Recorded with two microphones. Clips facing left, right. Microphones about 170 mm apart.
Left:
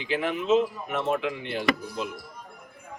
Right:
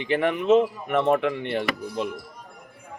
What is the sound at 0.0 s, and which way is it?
Speech, 60° right (ahead or behind).